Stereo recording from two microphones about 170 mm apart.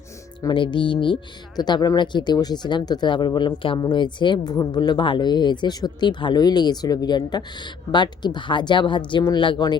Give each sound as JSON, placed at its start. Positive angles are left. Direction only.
{"t": 0.4, "sound": "speech", "side_deg": 30}